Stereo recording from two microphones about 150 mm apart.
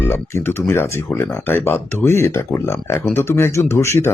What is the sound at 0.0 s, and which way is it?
Speech, 15° left (ahead or behind).